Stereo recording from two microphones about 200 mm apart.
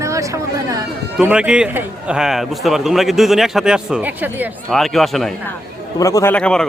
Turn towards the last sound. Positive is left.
turn(degrees=5)  # may be behind; listen again after turning